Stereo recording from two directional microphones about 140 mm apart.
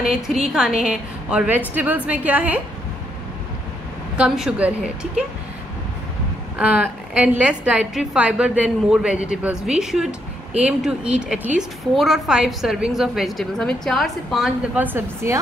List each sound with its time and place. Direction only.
0.5 s a woman's voice: 5° right (ahead or behind)
4.2 s a woman's voice: 5° right (ahead or behind)
6.6 s a woman's voice: 10° right (ahead or behind)
14.8 s a woman's voice: 15° right (ahead or behind)